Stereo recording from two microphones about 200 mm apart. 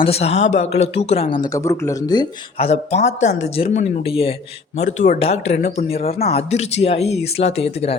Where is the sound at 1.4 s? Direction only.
15° left (ahead or behind).